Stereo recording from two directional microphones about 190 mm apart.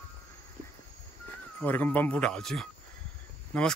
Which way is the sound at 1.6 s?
10° left (ahead or behind).